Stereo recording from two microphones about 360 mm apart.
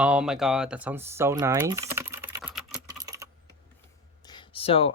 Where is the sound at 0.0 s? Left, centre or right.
Centre.